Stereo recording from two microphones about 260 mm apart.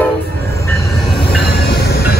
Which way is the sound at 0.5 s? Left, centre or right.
Centre.